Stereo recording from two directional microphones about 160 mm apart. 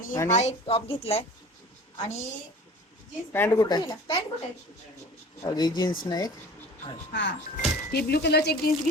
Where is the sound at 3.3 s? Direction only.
15° left (ahead or behind).